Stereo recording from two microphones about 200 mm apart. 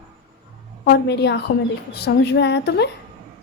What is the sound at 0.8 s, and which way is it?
A woman's voice, 55° left (ahead or behind).